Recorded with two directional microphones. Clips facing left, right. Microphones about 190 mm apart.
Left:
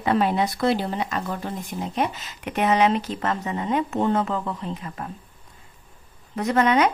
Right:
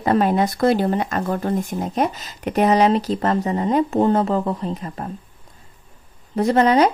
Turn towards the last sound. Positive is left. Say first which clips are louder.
# right 4 dB
turn(degrees=-35)  # may be behind; listen again after turning